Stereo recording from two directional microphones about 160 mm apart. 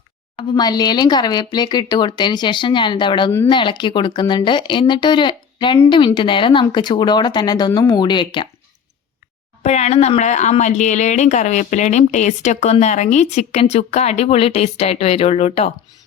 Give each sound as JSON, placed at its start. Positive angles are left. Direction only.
{"t": 0.3, "sound": "speech", "side_deg": 25}
{"t": 9.6, "sound": "a woman's voice", "side_deg": 45}